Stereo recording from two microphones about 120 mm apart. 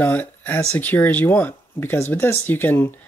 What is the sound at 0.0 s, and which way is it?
Speech, 15° left (ahead or behind).